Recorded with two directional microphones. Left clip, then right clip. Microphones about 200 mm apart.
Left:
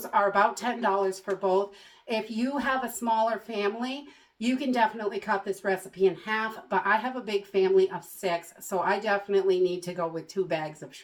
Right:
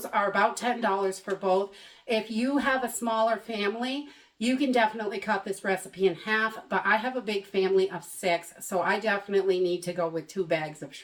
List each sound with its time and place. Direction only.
0.0 s speech: 20° right (ahead or behind)